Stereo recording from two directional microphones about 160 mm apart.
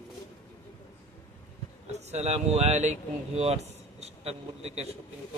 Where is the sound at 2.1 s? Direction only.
45° right (ahead or behind).